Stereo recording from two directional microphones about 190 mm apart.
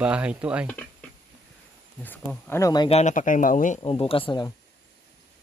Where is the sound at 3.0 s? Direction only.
40° left (ahead or behind).